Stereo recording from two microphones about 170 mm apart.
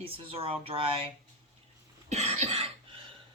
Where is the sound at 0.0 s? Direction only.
35° right (ahead or behind).